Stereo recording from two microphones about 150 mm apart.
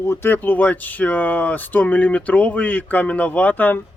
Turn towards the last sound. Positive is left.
turn(degrees=10)  # may be behind; listen again after turning